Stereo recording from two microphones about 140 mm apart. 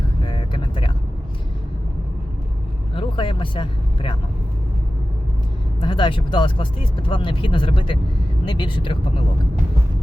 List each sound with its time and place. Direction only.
0.3 s vehicle: 35° left (ahead or behind)
2.9 s speech: 40° left (ahead or behind)
5.8 s speech: 35° left (ahead or behind)